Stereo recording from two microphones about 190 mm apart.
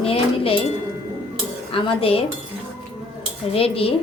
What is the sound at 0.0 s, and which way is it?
Dishes, 30° left (ahead or behind).